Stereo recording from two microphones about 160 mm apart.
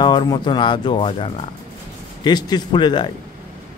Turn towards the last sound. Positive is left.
turn(degrees=30)  # may be behind; listen again after turning